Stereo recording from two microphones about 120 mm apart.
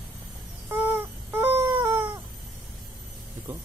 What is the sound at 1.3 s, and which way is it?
Whimper, 20° right (ahead or behind).